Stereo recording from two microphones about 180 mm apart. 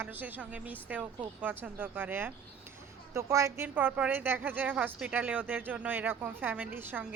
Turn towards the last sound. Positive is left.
turn(degrees=-10)  # may be behind; listen again after turning